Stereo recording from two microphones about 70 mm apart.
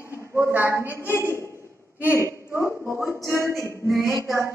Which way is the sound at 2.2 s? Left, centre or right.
Right.